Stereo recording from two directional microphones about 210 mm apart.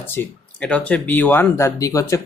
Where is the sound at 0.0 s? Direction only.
10° left (ahead or behind).